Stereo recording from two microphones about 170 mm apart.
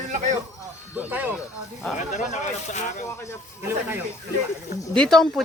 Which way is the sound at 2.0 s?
45° left (ahead or behind).